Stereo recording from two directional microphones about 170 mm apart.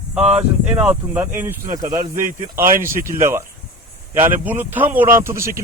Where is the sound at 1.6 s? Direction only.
55° right (ahead or behind).